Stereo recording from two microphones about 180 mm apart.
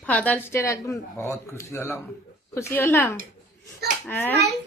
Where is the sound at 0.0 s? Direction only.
10° left (ahead or behind).